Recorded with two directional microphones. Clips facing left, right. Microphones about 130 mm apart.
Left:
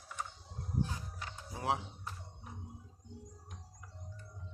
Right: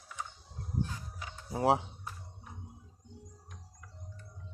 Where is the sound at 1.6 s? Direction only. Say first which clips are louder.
Right 8 dB; 30° right (ahead or behind).